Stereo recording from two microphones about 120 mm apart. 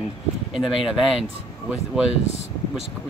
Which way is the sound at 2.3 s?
60° right (ahead or behind).